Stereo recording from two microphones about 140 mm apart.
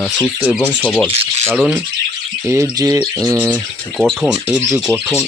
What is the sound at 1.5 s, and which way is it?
Speech, 5° right (ahead or behind).